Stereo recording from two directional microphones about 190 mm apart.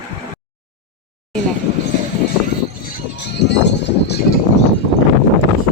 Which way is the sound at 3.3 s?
65° left (ahead or behind).